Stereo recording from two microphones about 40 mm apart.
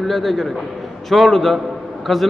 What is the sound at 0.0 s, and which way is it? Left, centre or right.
A man's voice, centre.